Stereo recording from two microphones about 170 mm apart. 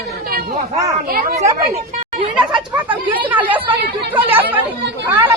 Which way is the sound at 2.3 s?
10° right (ahead or behind).